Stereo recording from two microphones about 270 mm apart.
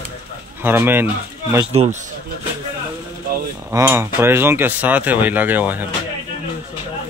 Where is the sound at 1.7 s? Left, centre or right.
Right.